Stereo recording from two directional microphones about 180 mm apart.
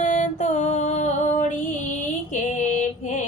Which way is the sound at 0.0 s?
45° left (ahead or behind).